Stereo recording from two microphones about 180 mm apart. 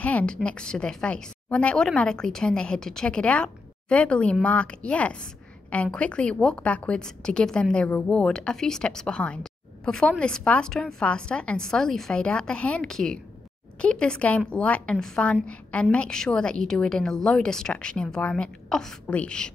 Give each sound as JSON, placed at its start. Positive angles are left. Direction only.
{"t": 0.0, "sound": "a woman's voice", "side_deg": 5}